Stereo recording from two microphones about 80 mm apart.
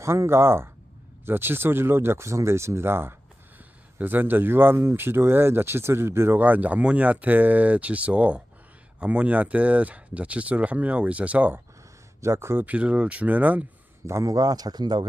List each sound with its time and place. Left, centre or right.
0.0 s speech: right; by 11.6 s centre
12.2 s speech: right
12.6 s speech: centre
14.1 s speech: right